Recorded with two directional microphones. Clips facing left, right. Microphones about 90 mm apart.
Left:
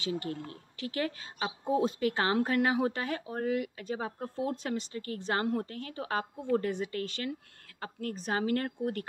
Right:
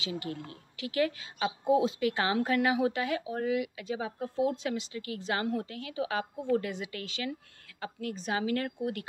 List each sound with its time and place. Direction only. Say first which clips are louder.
0.0 s a woman's voice: left 2 dB; 40° left (ahead or behind)